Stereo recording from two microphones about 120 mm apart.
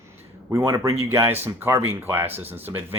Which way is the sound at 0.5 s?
30° right (ahead or behind).